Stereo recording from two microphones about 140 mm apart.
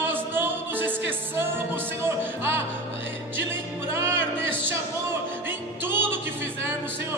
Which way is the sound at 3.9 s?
15° right (ahead or behind).